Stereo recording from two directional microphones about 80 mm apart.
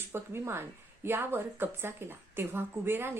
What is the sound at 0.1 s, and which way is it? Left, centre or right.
Speech, right.